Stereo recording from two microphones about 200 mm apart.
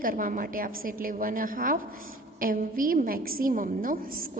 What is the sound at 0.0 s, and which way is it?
A woman's voice, 45° right (ahead or behind).